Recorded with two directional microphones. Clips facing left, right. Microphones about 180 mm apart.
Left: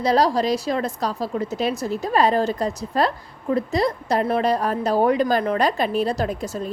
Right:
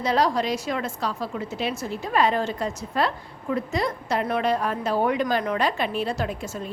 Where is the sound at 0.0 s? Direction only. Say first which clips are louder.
Left 4 dB; 35° left (ahead or behind).